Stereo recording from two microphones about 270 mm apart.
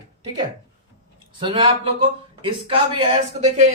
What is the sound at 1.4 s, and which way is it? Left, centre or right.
Speech, centre.